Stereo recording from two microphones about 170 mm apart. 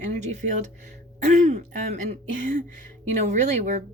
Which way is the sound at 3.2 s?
45° right (ahead or behind).